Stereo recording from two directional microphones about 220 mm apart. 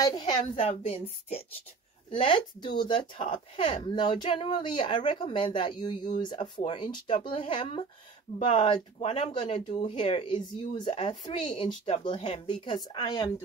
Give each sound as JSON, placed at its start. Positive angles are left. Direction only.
{"t": 0.0, "sound": "a woman's voice", "side_deg": 20}